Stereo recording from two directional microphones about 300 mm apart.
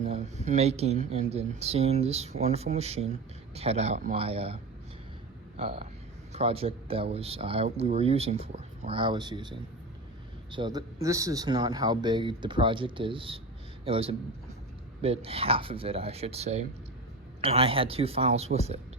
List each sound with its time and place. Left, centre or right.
0.0 s speech: right